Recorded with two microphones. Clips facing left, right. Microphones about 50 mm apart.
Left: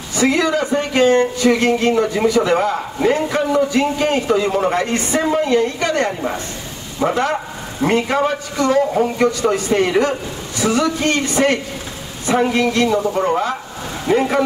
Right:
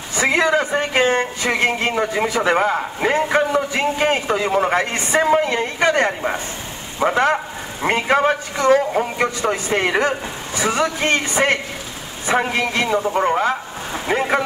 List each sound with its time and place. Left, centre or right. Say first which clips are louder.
0.1 s speech: left 1 dB; right